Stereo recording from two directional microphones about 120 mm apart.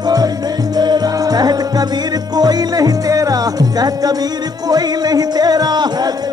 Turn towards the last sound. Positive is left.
turn(degrees=-35)  # may be behind; listen again after turning